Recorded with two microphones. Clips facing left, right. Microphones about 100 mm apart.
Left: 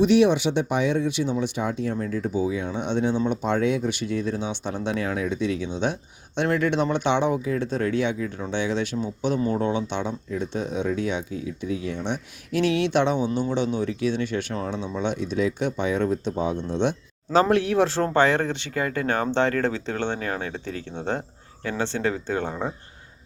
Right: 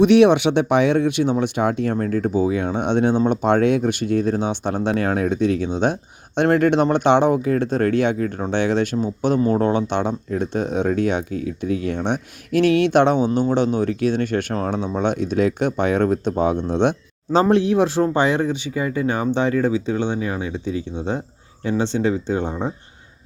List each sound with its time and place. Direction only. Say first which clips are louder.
0.0 s speech: right 5 dB; 65° right (ahead or behind)
17.5 s speech: right 4 dB; 20° right (ahead or behind)